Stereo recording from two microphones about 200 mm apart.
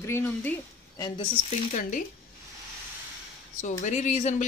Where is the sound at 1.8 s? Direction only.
40° left (ahead or behind).